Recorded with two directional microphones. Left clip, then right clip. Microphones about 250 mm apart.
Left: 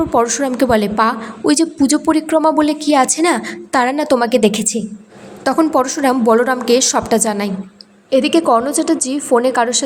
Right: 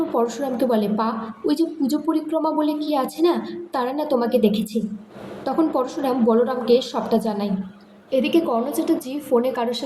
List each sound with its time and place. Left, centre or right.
0.2 s a woman's voice: left